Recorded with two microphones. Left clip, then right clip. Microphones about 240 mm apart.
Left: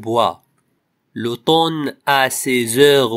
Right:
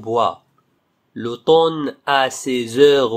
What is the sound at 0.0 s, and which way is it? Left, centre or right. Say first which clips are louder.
Speech: left 1 dB; left.